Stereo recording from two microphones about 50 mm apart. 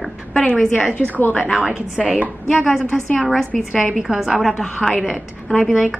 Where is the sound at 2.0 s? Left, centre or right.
Right.